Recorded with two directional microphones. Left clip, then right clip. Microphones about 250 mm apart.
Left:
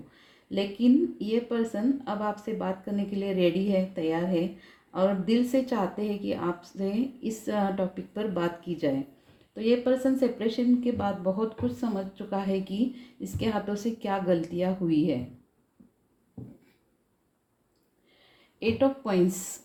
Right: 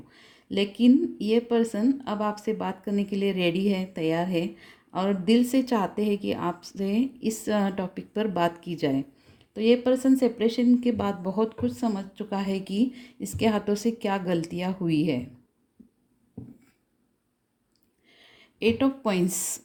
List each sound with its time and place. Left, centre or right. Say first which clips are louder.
0.5 s speech: right 3 dB; right
18.6 s speech: right 1 dB; right